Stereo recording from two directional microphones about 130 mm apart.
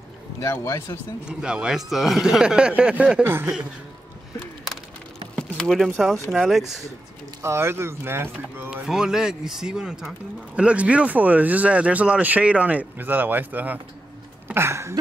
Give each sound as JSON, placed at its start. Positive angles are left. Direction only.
{"t": 0.4, "sound": "speech", "side_deg": 20}
{"t": 1.2, "sound": "speech", "side_deg": -5}
{"t": 3.3, "sound": "speech", "side_deg": -20}
{"t": 5.3, "sound": "speech", "side_deg": 0}
{"t": 7.4, "sound": "speech", "side_deg": -20}
{"t": 8.6, "sound": "speech", "side_deg": -5}
{"t": 14.5, "sound": "a sound", "side_deg": -20}